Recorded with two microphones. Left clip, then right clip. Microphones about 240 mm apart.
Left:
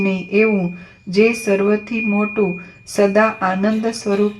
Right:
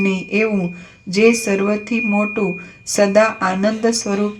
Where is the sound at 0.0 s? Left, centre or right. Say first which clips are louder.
Left 2 dB; right.